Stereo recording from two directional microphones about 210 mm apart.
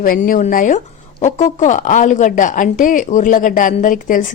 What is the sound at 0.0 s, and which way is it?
Speech, 40° left (ahead or behind).